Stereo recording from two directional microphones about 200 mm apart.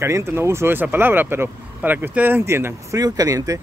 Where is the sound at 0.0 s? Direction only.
15° right (ahead or behind).